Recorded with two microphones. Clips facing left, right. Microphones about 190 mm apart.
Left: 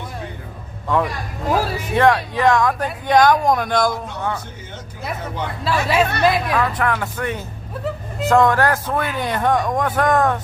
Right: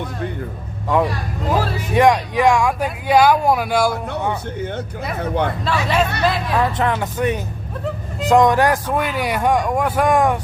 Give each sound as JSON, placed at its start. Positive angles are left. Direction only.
{"t": 0.9, "sound": "speech", "side_deg": -15}
{"t": 1.5, "sound": "speech", "side_deg": 10}
{"t": 2.0, "sound": "speech", "side_deg": -15}
{"t": 5.2, "sound": "speech", "side_deg": -60}
{"t": 5.6, "sound": "speech", "side_deg": 10}
{"t": 6.5, "sound": "speech", "side_deg": -25}